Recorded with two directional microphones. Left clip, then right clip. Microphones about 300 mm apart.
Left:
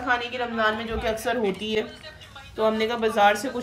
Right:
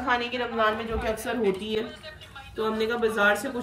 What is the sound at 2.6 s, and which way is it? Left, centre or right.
Speech, left.